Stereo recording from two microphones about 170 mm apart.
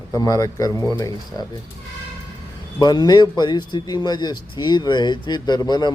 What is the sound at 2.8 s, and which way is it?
Speech, 25° left (ahead or behind).